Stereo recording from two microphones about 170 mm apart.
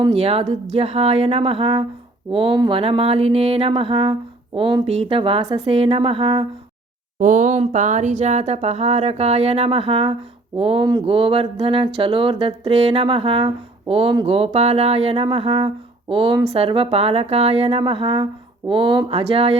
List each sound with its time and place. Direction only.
0.0 s speech: 35° right (ahead or behind)
7.2 s speech: 50° right (ahead or behind)